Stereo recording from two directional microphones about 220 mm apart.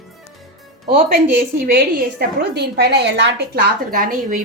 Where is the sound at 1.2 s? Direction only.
40° right (ahead or behind).